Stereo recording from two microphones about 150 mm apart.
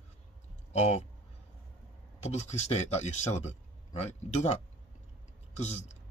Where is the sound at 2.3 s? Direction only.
45° left (ahead or behind).